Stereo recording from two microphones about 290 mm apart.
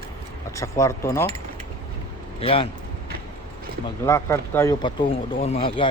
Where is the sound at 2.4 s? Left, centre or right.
Centre.